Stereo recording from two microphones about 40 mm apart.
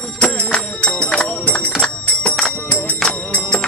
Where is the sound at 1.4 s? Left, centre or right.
Left.